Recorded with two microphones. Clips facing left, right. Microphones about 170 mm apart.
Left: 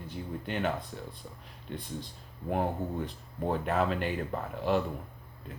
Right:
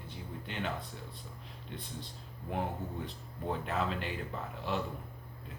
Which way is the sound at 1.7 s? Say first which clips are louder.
Left 6 dB; 50° left (ahead or behind).